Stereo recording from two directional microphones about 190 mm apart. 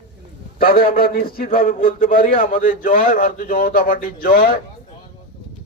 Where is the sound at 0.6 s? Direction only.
50° left (ahead or behind).